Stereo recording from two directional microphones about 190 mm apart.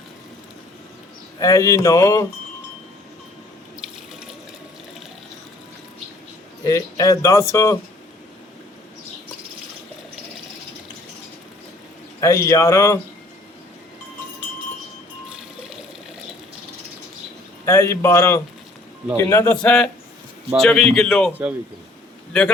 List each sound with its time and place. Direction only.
1.4 s speech: 15° left (ahead or behind)
6.7 s speech: 15° left (ahead or behind)
12.2 s speech: 15° left (ahead or behind)
17.7 s speech: 15° left (ahead or behind)
20.6 s a man's voice: centre (ahead or behind)